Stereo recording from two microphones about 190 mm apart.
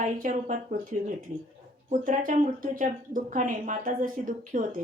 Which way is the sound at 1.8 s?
45° right (ahead or behind).